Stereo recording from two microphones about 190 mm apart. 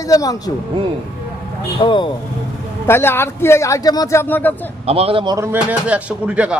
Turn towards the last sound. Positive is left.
turn(degrees=-5)  # may be behind; listen again after turning